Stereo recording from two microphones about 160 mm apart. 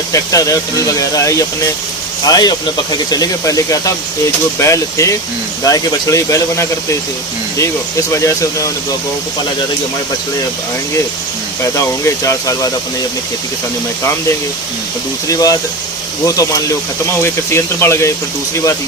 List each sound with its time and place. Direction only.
0.1 s speech: 20° left (ahead or behind)
11.6 s speech: 20° left (ahead or behind)
15.3 s speech: 20° left (ahead or behind)